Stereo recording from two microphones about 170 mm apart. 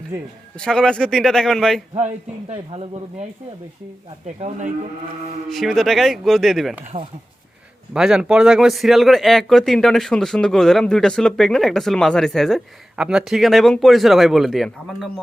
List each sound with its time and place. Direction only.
0.1 s a man's voice: 15° right (ahead or behind)
0.5 s speech: 5° left (ahead or behind)
2.5 s speech: 35° right (ahead or behind)
4.4 s speech: 40° right (ahead or behind)
5.5 s speech: centre (ahead or behind)
6.8 s speech: 35° right (ahead or behind)
7.9 s speech: 5° right (ahead or behind)